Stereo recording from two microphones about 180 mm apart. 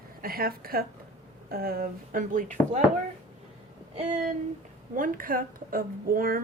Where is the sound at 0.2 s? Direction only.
55° right (ahead or behind).